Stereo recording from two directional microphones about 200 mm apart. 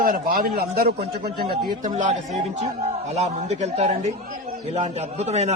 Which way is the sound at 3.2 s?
35° right (ahead or behind).